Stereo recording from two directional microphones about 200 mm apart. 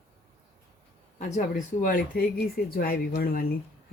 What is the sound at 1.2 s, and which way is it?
Speech, 40° left (ahead or behind).